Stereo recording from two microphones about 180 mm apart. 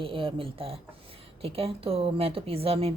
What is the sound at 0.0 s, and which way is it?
A woman's voice, 30° right (ahead or behind).